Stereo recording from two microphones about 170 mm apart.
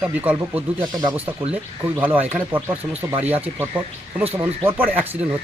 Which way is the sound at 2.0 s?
10° right (ahead or behind).